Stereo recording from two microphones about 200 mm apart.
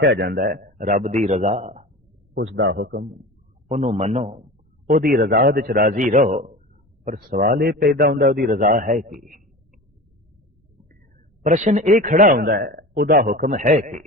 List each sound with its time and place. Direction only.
0.0 s a man's voice: 55° right (ahead or behind); by 1.9 s 35° right (ahead or behind)
2.3 s a man's voice: 65° right (ahead or behind); by 3.2 s 50° right (ahead or behind)
3.7 s a man's voice: 35° right (ahead or behind)
4.9 s a man's voice: 45° right (ahead or behind)
11.4 s a man's voice: 35° right (ahead or behind)